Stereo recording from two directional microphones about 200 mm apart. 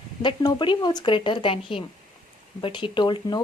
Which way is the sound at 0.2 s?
25° left (ahead or behind).